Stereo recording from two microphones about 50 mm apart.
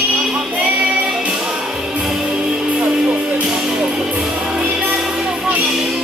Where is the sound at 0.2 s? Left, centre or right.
Centre.